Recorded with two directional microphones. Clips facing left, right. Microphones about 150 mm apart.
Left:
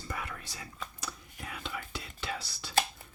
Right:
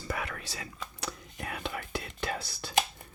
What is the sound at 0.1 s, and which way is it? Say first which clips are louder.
Speech: right 5 dB; 90° right.